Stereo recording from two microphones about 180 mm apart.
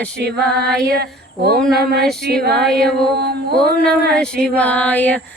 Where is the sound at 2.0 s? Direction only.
5° left (ahead or behind).